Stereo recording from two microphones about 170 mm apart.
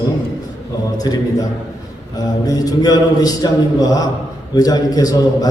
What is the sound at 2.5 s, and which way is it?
A man's voice, 20° left (ahead or behind).